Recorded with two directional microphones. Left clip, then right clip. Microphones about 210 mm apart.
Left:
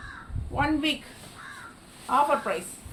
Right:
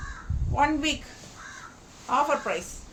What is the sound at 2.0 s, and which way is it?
Speech, 20° right (ahead or behind).